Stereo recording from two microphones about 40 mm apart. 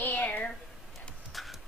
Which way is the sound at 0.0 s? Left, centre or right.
Left.